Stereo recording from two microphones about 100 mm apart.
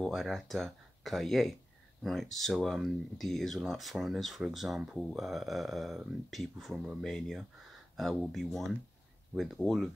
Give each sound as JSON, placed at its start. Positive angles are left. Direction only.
{"t": 0.0, "sound": "speech", "side_deg": 0}